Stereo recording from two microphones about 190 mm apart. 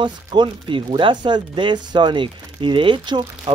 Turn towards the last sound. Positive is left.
turn(degrees=-25)  # may be behind; listen again after turning